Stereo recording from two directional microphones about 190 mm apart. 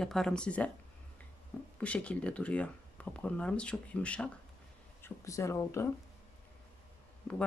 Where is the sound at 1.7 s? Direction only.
5° left (ahead or behind).